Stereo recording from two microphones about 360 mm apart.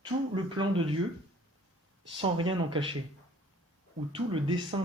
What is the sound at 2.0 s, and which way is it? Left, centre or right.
Speech, centre.